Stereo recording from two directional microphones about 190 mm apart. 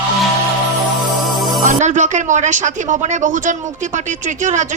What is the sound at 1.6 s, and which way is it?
A woman's voice, 40° right (ahead or behind).